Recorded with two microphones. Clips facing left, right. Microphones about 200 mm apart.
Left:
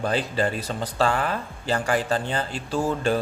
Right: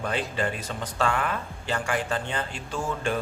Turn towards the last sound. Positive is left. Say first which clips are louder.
# left 5 dB
turn(degrees=35)  # may be behind; listen again after turning